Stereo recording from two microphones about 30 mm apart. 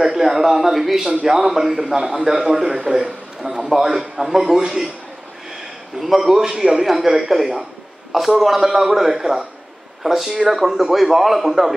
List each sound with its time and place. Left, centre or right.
0.0 s a man's voice: centre
1.5 s a man's voice: centre
1.8 s a man's voice: centre
2.6 s a man's voice: right
2.9 s a man's voice: centre
5.9 s a man's voice: centre
6.9 s a man's voice: centre